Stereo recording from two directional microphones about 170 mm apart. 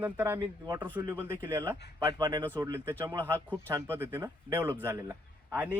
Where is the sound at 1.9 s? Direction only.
25° right (ahead or behind).